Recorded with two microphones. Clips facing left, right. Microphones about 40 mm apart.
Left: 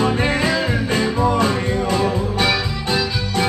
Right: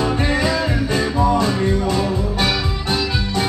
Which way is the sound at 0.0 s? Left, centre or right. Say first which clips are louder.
Left 1 dB; left.